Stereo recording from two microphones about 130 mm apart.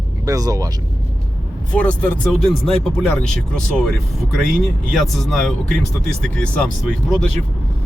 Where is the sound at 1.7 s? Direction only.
10° left (ahead or behind).